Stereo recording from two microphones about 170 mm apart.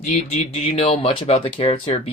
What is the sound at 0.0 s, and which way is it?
Speech, 45° left (ahead or behind).